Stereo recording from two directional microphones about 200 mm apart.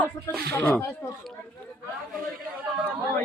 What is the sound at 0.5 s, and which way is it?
Speech, 10° left (ahead or behind).